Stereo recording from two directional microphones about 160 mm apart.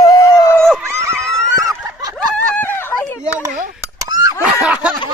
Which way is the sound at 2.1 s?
5° left (ahead or behind).